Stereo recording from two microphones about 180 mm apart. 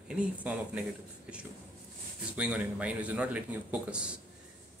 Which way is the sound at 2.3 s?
5° right (ahead or behind).